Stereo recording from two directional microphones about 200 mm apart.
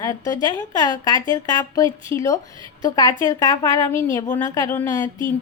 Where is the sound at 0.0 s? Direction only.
20° left (ahead or behind).